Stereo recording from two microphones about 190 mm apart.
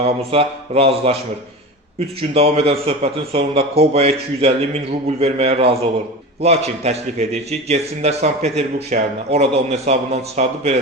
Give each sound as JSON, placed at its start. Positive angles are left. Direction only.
{"t": 0.0, "sound": "a man's voice", "side_deg": -30}